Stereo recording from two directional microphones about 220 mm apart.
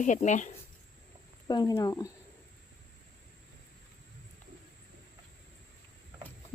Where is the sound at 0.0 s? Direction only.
35° left (ahead or behind).